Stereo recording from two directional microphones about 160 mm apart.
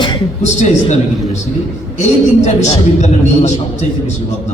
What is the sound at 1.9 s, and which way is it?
A man's voice, 45° left (ahead or behind).